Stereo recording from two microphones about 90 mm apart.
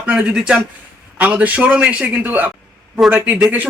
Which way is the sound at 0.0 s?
15° right (ahead or behind).